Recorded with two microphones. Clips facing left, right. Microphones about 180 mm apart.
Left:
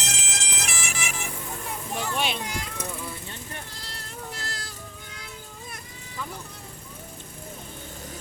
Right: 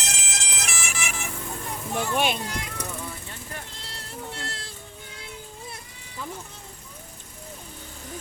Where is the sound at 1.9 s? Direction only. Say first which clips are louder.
Right 4 dB; 50° right (ahead or behind).